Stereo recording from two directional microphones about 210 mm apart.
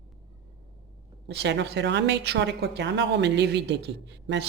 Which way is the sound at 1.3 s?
55° right (ahead or behind).